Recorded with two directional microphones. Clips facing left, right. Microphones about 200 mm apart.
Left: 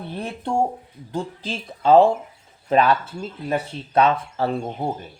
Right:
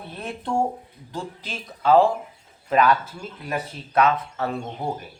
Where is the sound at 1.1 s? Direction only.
30° left (ahead or behind).